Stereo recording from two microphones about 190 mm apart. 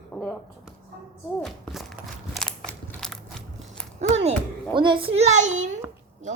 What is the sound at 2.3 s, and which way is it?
Crushing, 5° left (ahead or behind).